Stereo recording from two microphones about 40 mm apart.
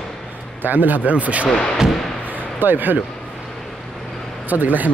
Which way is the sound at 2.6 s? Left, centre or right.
Right.